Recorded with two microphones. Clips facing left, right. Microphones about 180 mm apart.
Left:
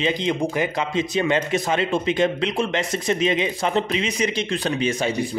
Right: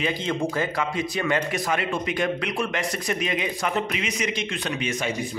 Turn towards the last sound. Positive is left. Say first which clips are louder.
# left 5 dB
turn(degrees=30)  # may be behind; listen again after turning